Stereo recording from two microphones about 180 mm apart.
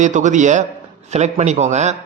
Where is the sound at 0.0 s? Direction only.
45° right (ahead or behind).